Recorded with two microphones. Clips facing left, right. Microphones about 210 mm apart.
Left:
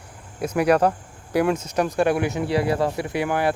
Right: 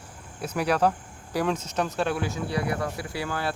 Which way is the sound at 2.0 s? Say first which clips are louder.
Left 7 dB; 60° left (ahead or behind).